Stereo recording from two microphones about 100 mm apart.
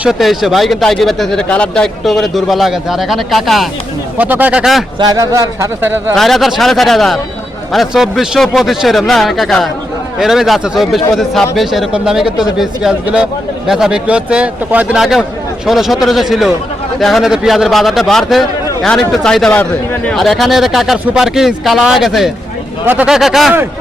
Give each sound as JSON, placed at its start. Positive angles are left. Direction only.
{"t": 0.0, "sound": "speech", "side_deg": 0}
{"t": 4.2, "sound": "speech", "side_deg": -15}
{"t": 5.1, "sound": "speech", "side_deg": -35}
{"t": 6.1, "sound": "speech", "side_deg": 0}
{"t": 15.6, "sound": "speech", "side_deg": 0}